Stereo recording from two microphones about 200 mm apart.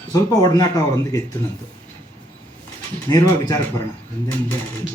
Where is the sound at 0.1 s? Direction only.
20° left (ahead or behind).